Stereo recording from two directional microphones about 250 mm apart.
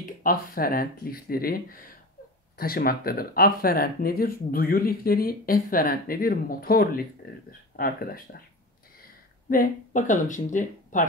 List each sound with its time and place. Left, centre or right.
0.2 s speech: left